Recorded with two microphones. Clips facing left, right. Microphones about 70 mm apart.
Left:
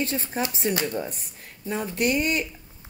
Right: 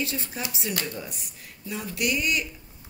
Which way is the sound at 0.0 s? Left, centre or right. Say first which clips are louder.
Left 4 dB; left.